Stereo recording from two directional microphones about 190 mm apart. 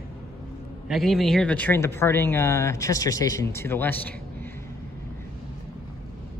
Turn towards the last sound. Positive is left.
turn(degrees=10)  # may be behind; listen again after turning